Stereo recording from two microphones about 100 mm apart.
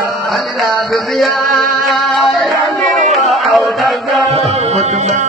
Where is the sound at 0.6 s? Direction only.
Centre (ahead or behind).